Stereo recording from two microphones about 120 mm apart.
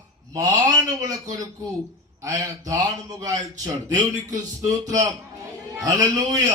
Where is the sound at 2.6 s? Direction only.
30° right (ahead or behind).